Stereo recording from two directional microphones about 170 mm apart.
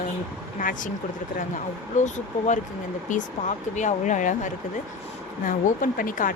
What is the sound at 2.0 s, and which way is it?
Speech, 45° left (ahead or behind).